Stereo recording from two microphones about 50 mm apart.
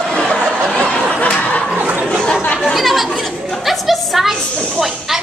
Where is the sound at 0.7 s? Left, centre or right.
Left.